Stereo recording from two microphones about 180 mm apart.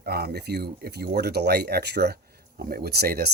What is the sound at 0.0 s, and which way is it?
Speech, 60° right (ahead or behind).